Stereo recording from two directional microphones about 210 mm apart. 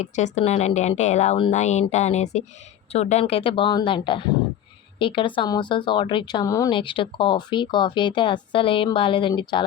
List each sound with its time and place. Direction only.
0.0 s a woman's voice: 35° left (ahead or behind)